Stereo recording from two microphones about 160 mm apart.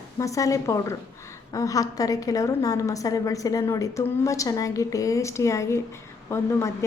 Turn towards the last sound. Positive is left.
turn(degrees=20)  # may be behind; listen again after turning